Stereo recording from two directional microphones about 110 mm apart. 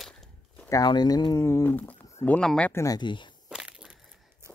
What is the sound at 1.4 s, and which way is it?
Speech, 25° left (ahead or behind).